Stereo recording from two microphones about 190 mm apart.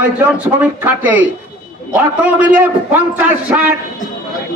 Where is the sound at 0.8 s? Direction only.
10° right (ahead or behind).